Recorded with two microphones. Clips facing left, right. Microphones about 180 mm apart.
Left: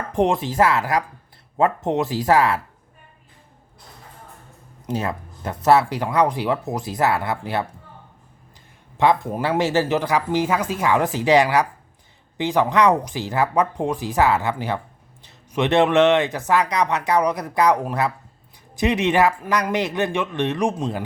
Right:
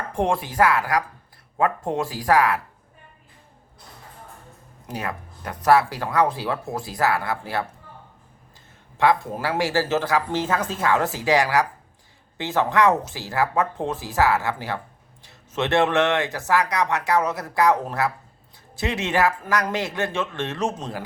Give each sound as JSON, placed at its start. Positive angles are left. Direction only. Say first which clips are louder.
{"t": 0.1, "sound": "speech", "louder": "left 4 dB", "side_deg": 20}
{"t": 4.9, "sound": "speech", "louder": "left 5 dB", "side_deg": 25}
{"t": 9.0, "sound": "speech", "louder": "left 2 dB", "side_deg": 20}